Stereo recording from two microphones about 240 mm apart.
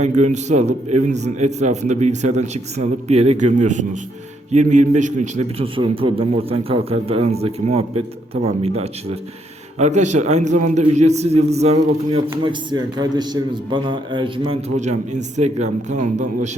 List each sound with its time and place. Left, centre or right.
0.0 s a man's voice: right
12.3 s a man's voice: centre